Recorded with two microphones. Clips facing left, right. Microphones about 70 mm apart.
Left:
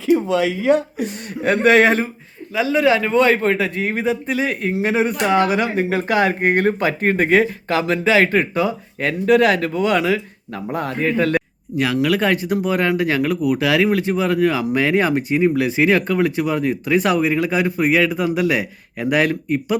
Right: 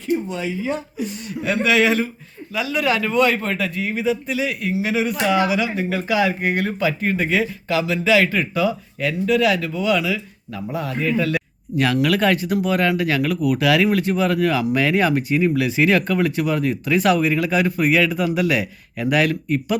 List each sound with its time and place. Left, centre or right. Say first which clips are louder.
0.0 s speech: left 7 dB; left
2.5 s speech: left 5 dB; left
3.8 s speech: left 1 dB; left
11.9 s speech: left 1 dB; left